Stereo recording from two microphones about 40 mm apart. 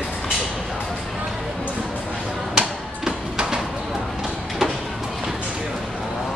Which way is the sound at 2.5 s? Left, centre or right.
Centre.